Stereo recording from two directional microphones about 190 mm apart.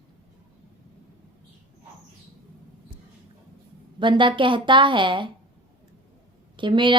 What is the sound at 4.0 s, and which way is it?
A woman's voice, 25° right (ahead or behind).